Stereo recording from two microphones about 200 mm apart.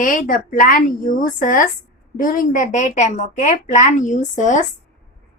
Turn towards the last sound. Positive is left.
turn(degrees=40)  # may be behind; listen again after turning